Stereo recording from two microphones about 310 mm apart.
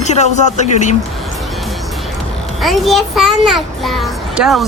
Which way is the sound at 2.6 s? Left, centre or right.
Centre.